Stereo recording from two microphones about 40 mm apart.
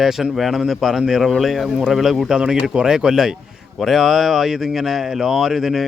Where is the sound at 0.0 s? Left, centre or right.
Centre.